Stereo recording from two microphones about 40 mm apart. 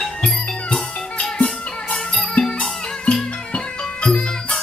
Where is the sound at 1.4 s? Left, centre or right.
Left.